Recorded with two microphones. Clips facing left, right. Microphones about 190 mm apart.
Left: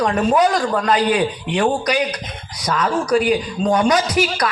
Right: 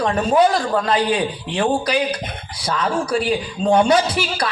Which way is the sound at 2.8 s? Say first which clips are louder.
Left 3 dB; 30° right (ahead or behind).